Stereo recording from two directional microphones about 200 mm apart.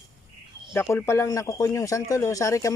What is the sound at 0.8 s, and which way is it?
Speech, 10° left (ahead or behind).